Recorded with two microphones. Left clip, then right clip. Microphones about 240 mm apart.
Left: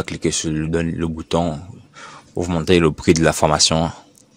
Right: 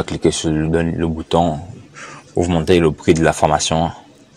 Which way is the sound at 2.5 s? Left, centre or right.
Left.